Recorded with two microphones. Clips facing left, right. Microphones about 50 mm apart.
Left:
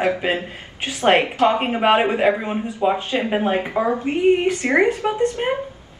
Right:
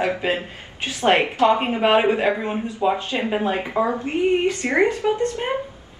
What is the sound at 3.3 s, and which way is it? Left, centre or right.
A woman's voice, left.